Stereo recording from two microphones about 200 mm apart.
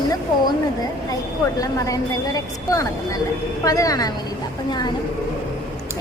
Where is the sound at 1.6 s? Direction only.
15° left (ahead or behind).